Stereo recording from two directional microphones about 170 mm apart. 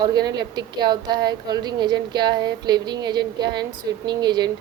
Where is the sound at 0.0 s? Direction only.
25° right (ahead or behind).